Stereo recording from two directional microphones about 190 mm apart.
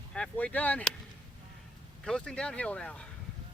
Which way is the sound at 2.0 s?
5° left (ahead or behind).